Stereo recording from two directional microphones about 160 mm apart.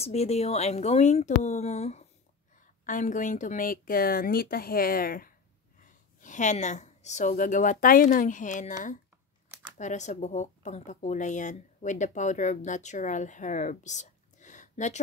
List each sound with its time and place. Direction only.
0.0 s speech: 40° left (ahead or behind)
2.6 s a woman's voice: 55° left (ahead or behind)
5.8 s a woman's voice: 50° left (ahead or behind)